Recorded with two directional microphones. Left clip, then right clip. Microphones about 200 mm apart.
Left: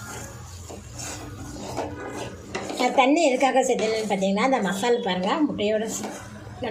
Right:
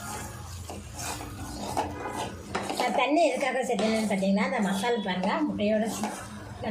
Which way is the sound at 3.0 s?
40° left (ahead or behind).